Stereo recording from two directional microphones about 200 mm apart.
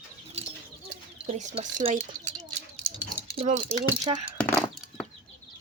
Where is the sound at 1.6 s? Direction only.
40° right (ahead or behind).